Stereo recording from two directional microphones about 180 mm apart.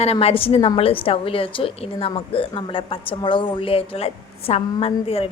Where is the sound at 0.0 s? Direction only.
35° left (ahead or behind).